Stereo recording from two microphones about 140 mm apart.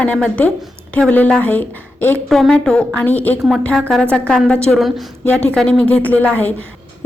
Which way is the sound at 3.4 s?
5° right (ahead or behind).